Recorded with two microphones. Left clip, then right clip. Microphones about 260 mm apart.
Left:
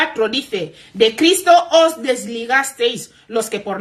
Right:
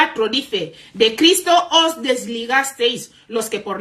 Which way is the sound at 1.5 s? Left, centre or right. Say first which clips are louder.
Left 3 dB; right.